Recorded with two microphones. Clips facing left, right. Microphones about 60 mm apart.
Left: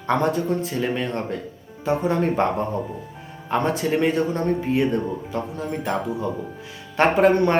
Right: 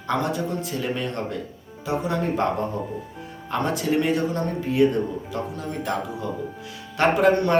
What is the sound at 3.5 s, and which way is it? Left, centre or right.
Speech, left.